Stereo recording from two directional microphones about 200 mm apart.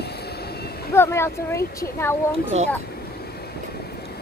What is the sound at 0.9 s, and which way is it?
Speech, 15° left (ahead or behind).